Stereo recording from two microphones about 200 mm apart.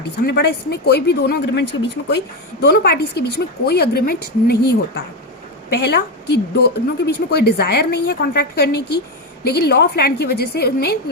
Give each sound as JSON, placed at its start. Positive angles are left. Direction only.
{"t": 0.3, "sound": "a woman's voice", "side_deg": 55}